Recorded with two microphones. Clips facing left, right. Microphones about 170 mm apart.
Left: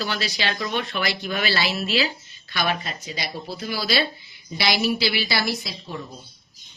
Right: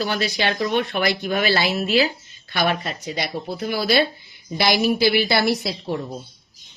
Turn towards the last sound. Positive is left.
turn(degrees=-65)  # may be behind; listen again after turning